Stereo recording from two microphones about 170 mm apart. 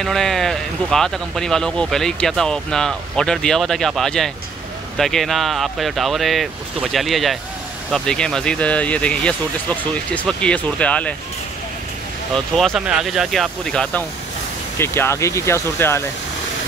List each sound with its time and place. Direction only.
0.0 s speech: centre (ahead or behind)
12.5 s speech: centre (ahead or behind); by 16.0 s 15° left (ahead or behind)